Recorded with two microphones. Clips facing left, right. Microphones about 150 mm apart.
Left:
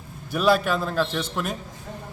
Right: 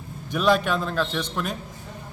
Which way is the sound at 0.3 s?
5° left (ahead or behind).